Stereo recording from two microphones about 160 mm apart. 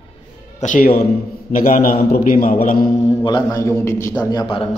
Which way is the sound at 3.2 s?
25° left (ahead or behind).